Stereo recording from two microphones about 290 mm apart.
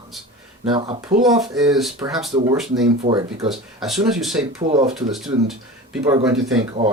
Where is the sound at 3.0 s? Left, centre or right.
Centre.